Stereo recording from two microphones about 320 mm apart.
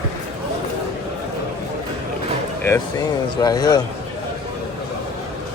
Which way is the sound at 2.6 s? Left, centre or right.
Centre.